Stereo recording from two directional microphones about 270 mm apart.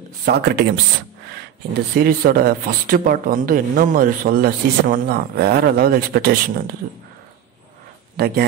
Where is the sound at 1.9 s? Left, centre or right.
Right.